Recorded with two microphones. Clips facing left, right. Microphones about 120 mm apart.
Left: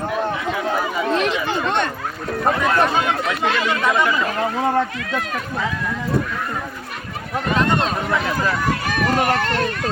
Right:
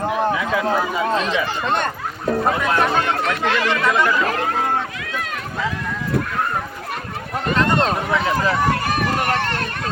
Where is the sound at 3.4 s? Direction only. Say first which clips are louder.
Even; 15° left (ahead or behind).